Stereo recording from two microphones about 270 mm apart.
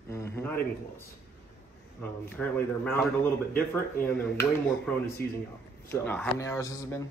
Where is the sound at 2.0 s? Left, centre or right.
Centre.